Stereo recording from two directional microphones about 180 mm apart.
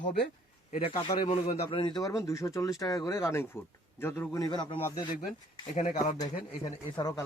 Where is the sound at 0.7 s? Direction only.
35° left (ahead or behind).